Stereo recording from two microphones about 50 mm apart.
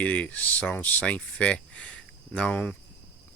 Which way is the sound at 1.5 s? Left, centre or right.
Left.